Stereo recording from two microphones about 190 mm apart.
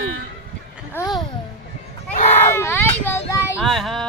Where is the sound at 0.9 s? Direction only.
20° left (ahead or behind).